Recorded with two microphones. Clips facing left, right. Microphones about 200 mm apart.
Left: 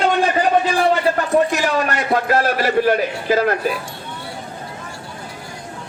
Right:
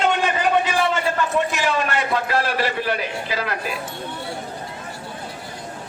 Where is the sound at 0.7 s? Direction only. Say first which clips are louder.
Left 4 dB; 40° left (ahead or behind).